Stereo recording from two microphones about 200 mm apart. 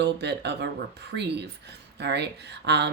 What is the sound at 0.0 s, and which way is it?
Speech, 55° right (ahead or behind).